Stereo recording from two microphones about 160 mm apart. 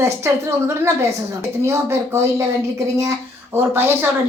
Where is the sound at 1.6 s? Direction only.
15° right (ahead or behind).